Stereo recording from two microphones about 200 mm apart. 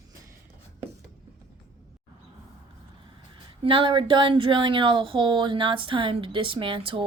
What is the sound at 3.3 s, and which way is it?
Speech, 25° right (ahead or behind).